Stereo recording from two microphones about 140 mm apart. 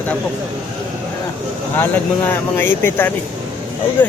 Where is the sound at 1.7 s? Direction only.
15° left (ahead or behind).